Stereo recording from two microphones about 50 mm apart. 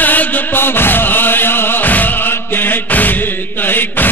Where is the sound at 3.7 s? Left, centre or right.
Left.